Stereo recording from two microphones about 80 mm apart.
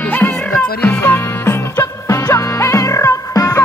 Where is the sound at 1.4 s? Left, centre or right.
Left.